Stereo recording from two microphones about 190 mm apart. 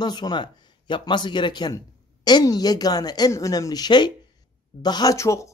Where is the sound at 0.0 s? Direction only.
25° left (ahead or behind).